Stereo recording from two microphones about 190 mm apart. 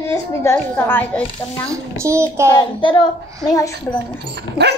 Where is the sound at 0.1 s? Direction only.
15° left (ahead or behind).